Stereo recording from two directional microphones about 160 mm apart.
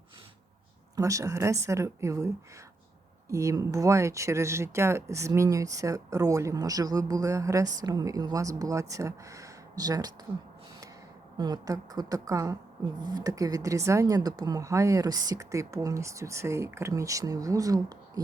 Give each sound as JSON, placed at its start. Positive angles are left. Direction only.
{"t": 0.9, "sound": "speech", "side_deg": -20}
{"t": 11.3, "sound": "speech", "side_deg": -25}